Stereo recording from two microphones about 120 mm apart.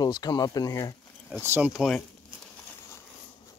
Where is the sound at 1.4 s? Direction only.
20° right (ahead or behind).